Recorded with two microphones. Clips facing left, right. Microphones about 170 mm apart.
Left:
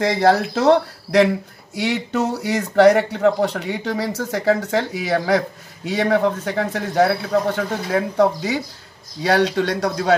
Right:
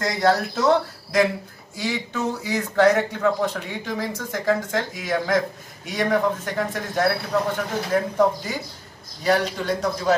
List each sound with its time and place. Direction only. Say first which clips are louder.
0.2 s speech: left 2 dB; 65° left (ahead or behind)